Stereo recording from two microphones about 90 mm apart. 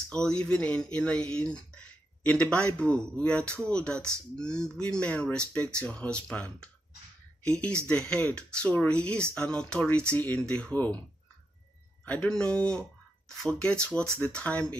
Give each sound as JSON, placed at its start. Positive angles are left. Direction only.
{"t": 0.1, "sound": "speech", "side_deg": 10}
{"t": 12.0, "sound": "a sound", "side_deg": 15}
{"t": 12.3, "sound": "speech", "side_deg": 10}